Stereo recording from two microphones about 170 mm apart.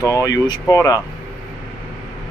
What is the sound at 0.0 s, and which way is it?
Speech, 20° left (ahead or behind).